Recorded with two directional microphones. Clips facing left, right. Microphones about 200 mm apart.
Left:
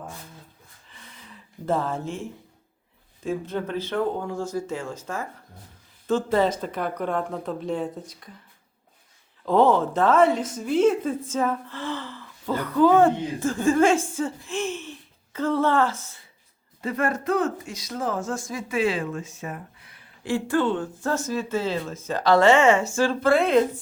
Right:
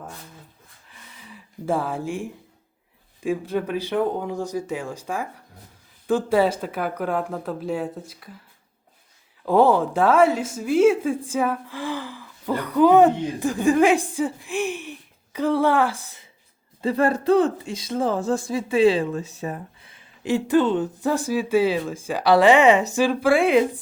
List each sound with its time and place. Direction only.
0.9 s a sound: 10° right (ahead or behind)
3.2 s speech: 10° right (ahead or behind)
9.5 s a woman's voice: 10° right (ahead or behind)
16.8 s speech: 30° right (ahead or behind); by 23.6 s 10° right (ahead or behind)